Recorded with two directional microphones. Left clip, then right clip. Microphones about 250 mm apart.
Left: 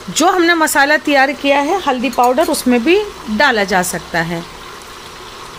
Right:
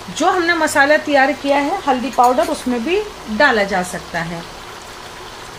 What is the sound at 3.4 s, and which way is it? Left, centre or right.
Speech, left.